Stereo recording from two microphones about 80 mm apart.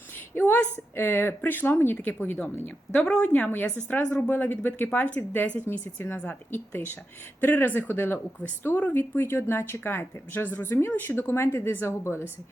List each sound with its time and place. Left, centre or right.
0.3 s a woman's voice: left
2.9 s a woman's voice: centre; by 12.3 s left